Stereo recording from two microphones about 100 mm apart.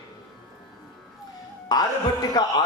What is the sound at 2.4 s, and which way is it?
Speech, 40° left (ahead or behind).